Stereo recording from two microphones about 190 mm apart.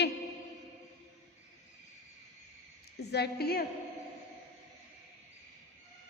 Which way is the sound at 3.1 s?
60° left (ahead or behind).